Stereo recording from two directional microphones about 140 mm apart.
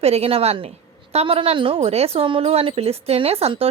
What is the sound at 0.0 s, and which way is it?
Speech, 45° right (ahead or behind).